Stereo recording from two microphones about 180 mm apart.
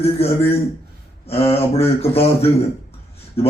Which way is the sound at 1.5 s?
35° left (ahead or behind).